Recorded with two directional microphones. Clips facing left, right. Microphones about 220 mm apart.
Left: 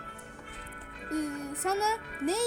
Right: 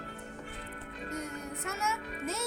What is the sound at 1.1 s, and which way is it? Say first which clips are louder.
Speech: left 8 dB; 35° left (ahead or behind).